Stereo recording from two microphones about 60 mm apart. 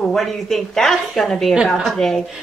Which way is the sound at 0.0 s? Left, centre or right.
Centre.